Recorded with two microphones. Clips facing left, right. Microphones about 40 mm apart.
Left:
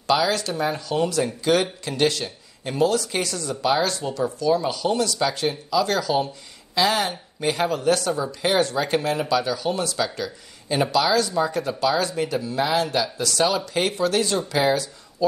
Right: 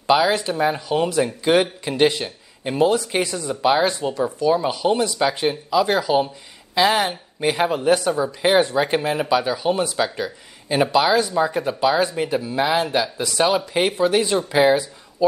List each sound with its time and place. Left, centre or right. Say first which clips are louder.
0.0 s speech: right 4 dB; right